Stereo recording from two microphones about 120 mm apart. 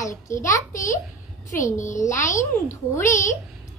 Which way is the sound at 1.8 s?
90° left.